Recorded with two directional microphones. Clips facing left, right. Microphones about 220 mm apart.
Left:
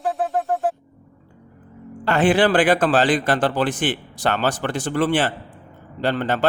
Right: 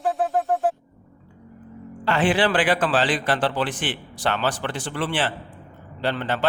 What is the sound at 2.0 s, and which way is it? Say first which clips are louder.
A man's voice: left 4 dB; 45° left (ahead or behind).